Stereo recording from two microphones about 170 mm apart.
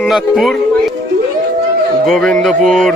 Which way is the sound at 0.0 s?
Centre (ahead or behind).